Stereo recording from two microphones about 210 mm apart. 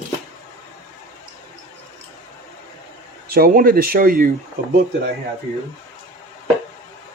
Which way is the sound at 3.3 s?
45° right (ahead or behind).